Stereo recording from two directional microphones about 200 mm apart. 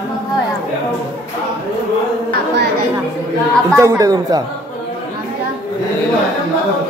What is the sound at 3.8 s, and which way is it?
Speech, 15° right (ahead or behind).